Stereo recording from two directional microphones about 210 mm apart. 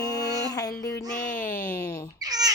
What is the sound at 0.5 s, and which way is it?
Music, 15° left (ahead or behind).